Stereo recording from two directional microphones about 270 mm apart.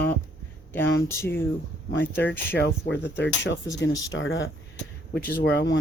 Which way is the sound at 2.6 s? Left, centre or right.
Left.